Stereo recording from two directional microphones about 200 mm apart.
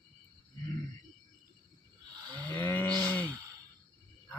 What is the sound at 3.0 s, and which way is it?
Sigh, 10° left (ahead or behind).